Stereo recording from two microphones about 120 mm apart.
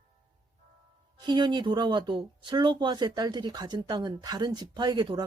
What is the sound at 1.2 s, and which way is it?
Speech, 40° right (ahead or behind).